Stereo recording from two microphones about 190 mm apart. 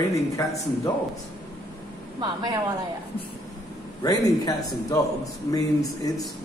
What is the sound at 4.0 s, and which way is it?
A man's voice, 20° left (ahead or behind).